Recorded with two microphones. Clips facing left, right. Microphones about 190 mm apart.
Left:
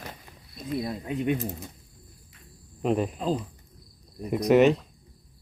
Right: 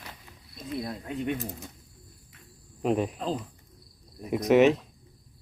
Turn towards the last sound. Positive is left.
turn(degrees=0)  # may be behind; listen again after turning